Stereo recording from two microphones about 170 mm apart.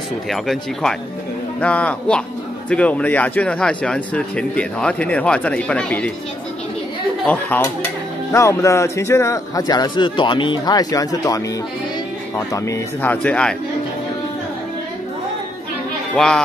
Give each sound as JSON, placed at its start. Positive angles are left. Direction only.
{"t": 0.3, "sound": "speech", "side_deg": 0}
{"t": 7.2, "sound": "speech", "side_deg": 10}
{"t": 16.2, "sound": "speech", "side_deg": 5}